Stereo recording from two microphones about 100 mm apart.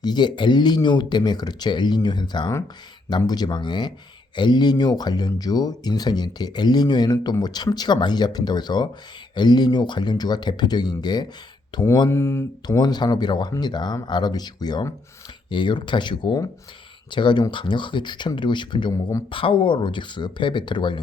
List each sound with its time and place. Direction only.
0.0 s speech: 45° left (ahead or behind)
12.0 s speech: 25° left (ahead or behind)
12.6 s speech: 45° left (ahead or behind)